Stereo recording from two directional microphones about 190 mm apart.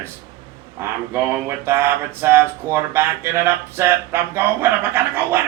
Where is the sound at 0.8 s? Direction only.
10° right (ahead or behind).